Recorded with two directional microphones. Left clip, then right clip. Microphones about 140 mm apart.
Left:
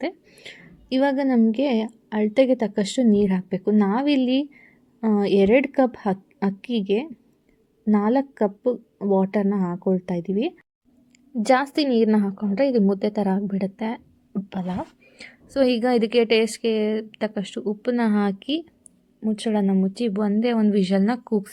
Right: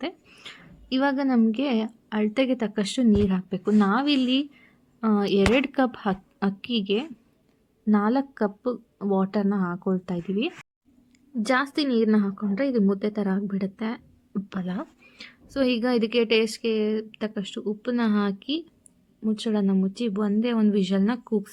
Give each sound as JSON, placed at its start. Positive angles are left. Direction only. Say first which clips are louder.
{"t": 0.3, "sound": "a woman's voice", "louder": "left 2 dB", "side_deg": 10}
{"t": 15.2, "sound": "a woman's voice", "louder": "left 5 dB", "side_deg": 15}